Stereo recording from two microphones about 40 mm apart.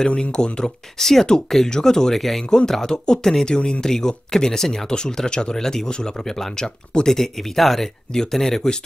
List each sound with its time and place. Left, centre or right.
0.1 s speech: left